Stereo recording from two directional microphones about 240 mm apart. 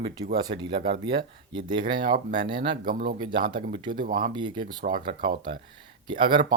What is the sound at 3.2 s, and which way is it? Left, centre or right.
Speech, centre.